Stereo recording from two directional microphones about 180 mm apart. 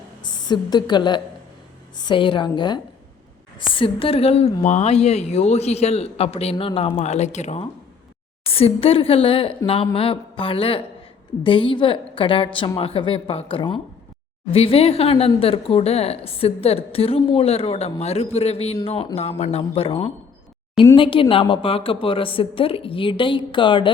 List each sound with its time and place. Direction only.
0.3 s a woman's voice: 25° left (ahead or behind)